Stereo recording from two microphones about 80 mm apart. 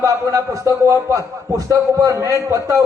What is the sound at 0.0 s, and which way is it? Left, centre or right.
Speech, right.